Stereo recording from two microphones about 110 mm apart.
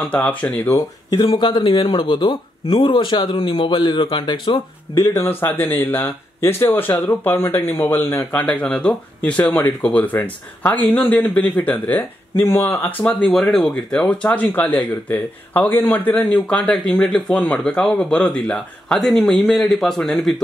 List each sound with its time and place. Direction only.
0.1 s speech: 15° left (ahead or behind)
1.3 s speech: 40° left (ahead or behind)
5.0 s speech: 25° left (ahead or behind)
13.3 s speech: centre (ahead or behind)